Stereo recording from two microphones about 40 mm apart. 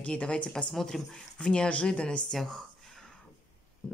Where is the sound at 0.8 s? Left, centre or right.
Centre.